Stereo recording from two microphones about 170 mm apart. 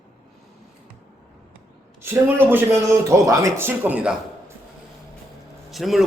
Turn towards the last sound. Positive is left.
turn(degrees=0)  # may be behind; listen again after turning